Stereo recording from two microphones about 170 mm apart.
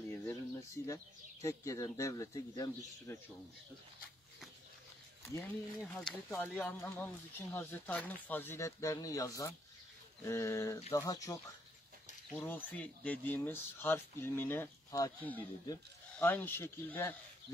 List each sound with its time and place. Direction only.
0.1 s speech: 20° left (ahead or behind)
5.3 s speech: 15° left (ahead or behind)
5.8 s speech: centre (ahead or behind)
6.8 s speech: 15° left (ahead or behind)